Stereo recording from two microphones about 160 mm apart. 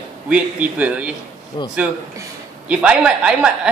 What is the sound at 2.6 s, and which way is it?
Speech, 5° right (ahead or behind).